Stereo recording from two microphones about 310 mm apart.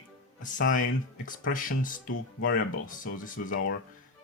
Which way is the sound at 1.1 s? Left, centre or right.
Left.